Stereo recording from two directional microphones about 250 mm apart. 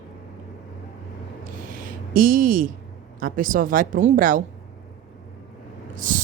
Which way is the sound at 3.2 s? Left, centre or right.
Right.